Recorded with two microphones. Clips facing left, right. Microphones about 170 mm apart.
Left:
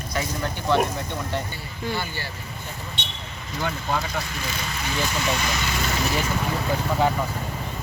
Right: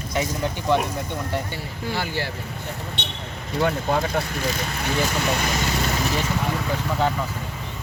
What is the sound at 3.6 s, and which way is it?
Speech, 55° right (ahead or behind).